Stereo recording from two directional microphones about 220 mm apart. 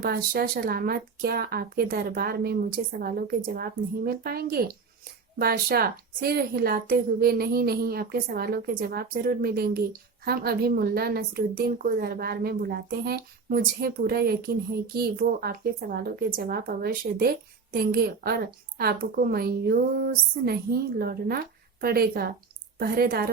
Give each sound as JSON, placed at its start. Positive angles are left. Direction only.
{"t": 0.0, "sound": "a woman's voice", "side_deg": -45}